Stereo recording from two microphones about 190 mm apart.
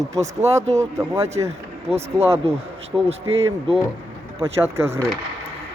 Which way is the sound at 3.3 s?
30° right (ahead or behind).